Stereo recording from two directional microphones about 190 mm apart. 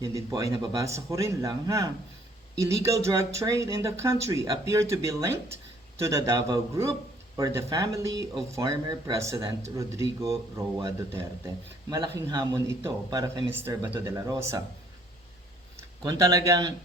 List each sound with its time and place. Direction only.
0.0 s speech: 15° right (ahead or behind)
16.0 s speech: 20° right (ahead or behind)